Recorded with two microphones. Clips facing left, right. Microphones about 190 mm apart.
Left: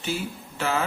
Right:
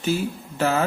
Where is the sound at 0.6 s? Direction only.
40° right (ahead or behind).